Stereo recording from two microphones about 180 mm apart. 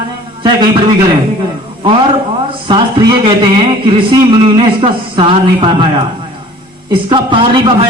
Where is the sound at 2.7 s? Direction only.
30° right (ahead or behind).